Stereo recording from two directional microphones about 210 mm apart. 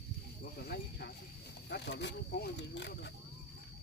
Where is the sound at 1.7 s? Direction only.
55° left (ahead or behind).